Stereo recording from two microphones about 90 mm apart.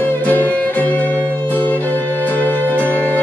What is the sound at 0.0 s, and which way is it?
Music, 20° left (ahead or behind).